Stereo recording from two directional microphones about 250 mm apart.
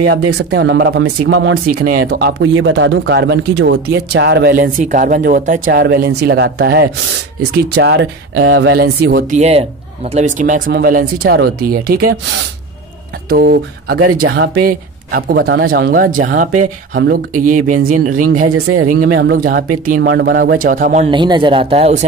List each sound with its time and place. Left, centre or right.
0.0 s speech: right
9.1 s speech: right
13.3 s speech: right
18.5 s speech: right
18.9 s speech: right